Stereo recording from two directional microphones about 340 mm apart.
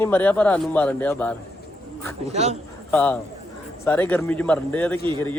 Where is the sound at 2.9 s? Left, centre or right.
Centre.